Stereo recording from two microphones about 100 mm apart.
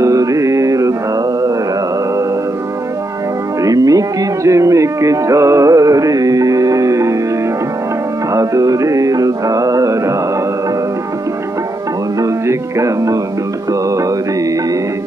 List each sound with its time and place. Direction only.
0.0 s music: 35° right (ahead or behind)
3.6 s music: 35° right (ahead or behind)
8.3 s music: 35° right (ahead or behind)
12.2 s music: 30° right (ahead or behind)